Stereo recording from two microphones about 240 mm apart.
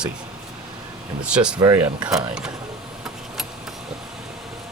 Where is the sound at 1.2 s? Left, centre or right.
Centre.